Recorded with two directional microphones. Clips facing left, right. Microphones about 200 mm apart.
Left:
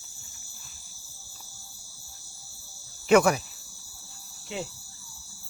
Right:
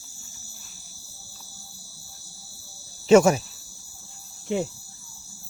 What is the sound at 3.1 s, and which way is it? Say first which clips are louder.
Speech: right 4 dB; 25° right (ahead or behind).